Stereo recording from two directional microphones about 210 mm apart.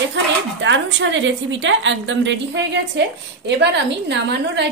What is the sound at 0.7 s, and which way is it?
A woman's voice, 60° right (ahead or behind).